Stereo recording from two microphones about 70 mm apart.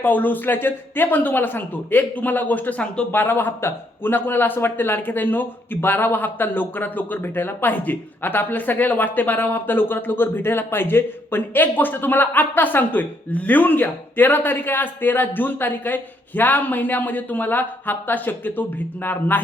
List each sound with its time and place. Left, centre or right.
0.0 s a man's voice: left
3.1 s a man's voice: left